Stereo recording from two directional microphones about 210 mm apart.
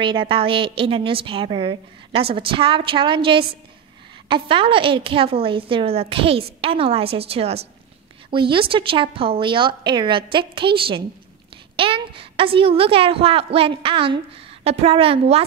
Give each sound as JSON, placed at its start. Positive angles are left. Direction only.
{"t": 0.0, "sound": "a woman's voice", "side_deg": -25}